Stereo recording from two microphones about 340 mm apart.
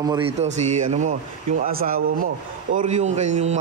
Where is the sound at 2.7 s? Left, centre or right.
Centre.